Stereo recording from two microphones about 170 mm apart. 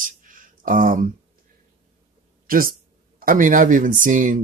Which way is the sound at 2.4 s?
55° right (ahead or behind).